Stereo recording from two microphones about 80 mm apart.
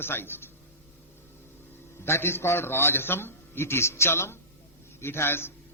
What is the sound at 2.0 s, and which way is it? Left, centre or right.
A man's voice, left.